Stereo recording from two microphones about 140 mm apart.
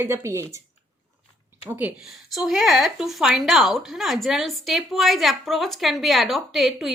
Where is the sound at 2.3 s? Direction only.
Centre (ahead or behind).